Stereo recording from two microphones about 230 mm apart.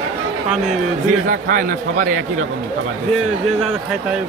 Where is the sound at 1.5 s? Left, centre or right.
Right.